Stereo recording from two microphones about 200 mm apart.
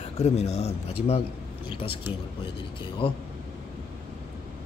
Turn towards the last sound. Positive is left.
turn(degrees=25)  # may be behind; listen again after turning